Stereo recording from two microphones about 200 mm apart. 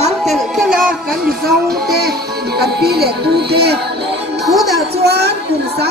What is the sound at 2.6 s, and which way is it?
Speech, 50° right (ahead or behind).